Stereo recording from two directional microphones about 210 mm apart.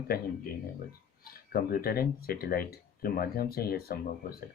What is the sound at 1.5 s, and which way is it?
Speech, 45° left (ahead or behind).